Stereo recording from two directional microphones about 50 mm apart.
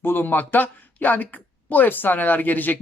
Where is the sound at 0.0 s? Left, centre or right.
Left.